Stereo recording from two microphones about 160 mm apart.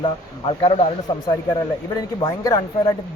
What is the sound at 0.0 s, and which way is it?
Speech, 35° left (ahead or behind).